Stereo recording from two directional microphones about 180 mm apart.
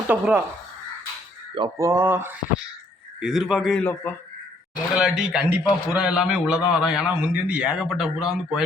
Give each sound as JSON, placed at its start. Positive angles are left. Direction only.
{"t": 0.1, "sound": "speech", "side_deg": -10}
{"t": 1.5, "sound": "speech", "side_deg": -20}
{"t": 3.2, "sound": "a man's voice", "side_deg": 0}
{"t": 4.9, "sound": "a man's voice", "side_deg": -5}